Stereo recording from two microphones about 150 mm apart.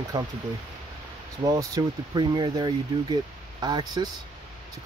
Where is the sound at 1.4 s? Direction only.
25° right (ahead or behind).